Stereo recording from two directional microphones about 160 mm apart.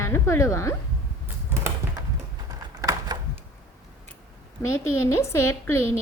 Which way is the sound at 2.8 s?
20° right (ahead or behind).